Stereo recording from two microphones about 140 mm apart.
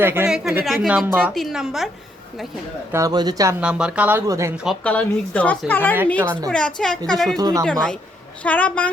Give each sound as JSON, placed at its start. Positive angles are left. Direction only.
{"t": 0.0, "sound": "speech", "side_deg": -15}
{"t": 0.3, "sound": "a woman's voice", "side_deg": -5}
{"t": 1.0, "sound": "speech", "side_deg": -15}
{"t": 1.3, "sound": "a woman's voice", "side_deg": 0}
{"t": 2.9, "sound": "speech", "side_deg": -25}
{"t": 3.6, "sound": "speech", "side_deg": -5}
{"t": 4.3, "sound": "speech", "side_deg": -20}
{"t": 4.8, "sound": "a woman's voice", "side_deg": 10}
{"t": 7.3, "sound": "speech", "side_deg": -25}
{"t": 7.6, "sound": "a woman's voice", "side_deg": 5}